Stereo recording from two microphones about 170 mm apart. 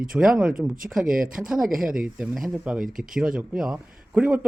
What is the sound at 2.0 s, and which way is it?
Speech, 5° right (ahead or behind).